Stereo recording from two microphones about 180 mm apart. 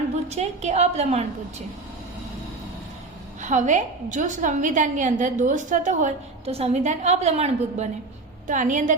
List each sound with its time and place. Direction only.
0.3 s a woman's voice: 40° right (ahead or behind)
3.4 s a woman's voice: 40° right (ahead or behind)